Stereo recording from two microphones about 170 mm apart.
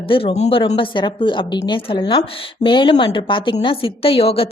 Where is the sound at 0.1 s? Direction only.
30° left (ahead or behind).